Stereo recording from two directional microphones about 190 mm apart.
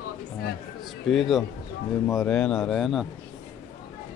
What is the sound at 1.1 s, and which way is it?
Speech, centre (ahead or behind).